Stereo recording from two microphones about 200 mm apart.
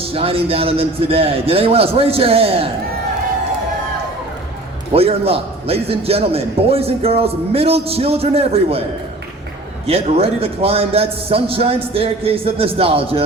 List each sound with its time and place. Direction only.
0.0 s a man's voice: 30° right (ahead or behind)
4.9 s a man's voice: 30° right (ahead or behind)
9.8 s a man's voice: 30° right (ahead or behind)